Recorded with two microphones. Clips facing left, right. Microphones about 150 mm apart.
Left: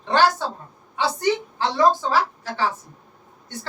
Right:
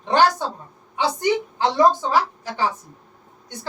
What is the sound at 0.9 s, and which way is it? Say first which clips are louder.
A woman's voice: right 1 dB; 15° right (ahead or behind).